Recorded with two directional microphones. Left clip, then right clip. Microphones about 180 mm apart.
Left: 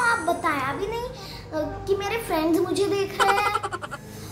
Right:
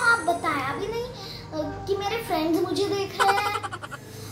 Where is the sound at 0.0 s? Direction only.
15° left (ahead or behind).